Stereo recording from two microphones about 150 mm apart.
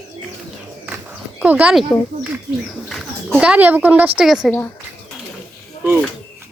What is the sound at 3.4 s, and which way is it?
Speech, 10° right (ahead or behind).